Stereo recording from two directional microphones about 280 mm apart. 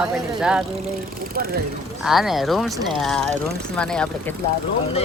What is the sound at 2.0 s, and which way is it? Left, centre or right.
Speech, centre.